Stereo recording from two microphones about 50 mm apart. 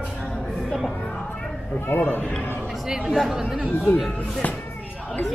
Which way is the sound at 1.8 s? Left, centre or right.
Left.